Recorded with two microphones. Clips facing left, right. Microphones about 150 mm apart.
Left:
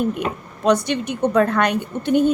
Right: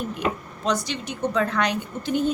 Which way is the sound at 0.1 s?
60° left (ahead or behind).